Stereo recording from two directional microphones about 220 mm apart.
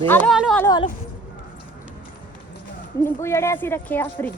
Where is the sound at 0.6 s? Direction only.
20° left (ahead or behind).